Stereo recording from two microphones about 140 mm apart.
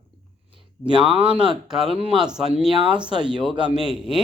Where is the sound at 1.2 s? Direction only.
5° right (ahead or behind).